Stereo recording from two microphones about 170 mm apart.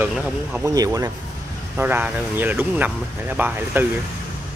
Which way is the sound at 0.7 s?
20° right (ahead or behind).